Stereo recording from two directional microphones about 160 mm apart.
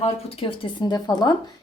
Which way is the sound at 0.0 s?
35° left (ahead or behind).